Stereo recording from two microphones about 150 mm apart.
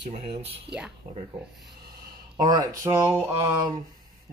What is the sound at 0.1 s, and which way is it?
Speech, 40° right (ahead or behind).